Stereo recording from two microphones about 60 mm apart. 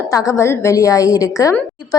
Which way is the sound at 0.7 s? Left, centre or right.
Left.